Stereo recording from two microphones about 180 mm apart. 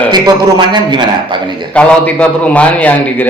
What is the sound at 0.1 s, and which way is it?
A man's voice, 20° right (ahead or behind).